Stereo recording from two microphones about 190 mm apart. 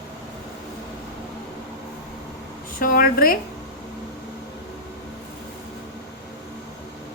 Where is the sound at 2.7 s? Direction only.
50° left (ahead or behind).